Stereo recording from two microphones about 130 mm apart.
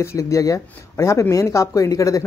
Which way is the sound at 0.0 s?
25° left (ahead or behind).